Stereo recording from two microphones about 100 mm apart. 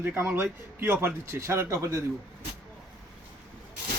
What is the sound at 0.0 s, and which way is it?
A man's voice, 20° right (ahead or behind).